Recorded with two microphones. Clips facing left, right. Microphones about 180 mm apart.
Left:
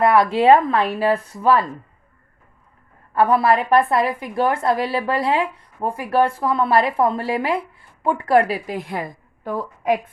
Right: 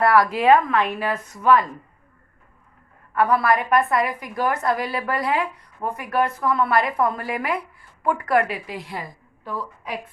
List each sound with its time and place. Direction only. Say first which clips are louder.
0.0 s a woman's voice: left 3 dB; 25° left (ahead or behind)
3.2 s a woman's voice: left 3 dB; 30° left (ahead or behind); by 10.0 s 50° left (ahead or behind)